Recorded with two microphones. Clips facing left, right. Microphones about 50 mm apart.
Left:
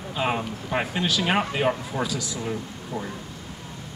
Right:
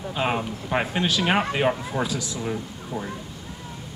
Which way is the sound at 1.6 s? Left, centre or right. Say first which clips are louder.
Right 1 dB; centre.